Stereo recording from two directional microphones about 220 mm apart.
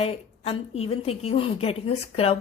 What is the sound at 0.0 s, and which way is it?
Speech, 25° left (ahead or behind).